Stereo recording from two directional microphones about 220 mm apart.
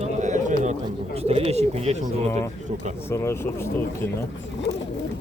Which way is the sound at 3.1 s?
10° left (ahead or behind).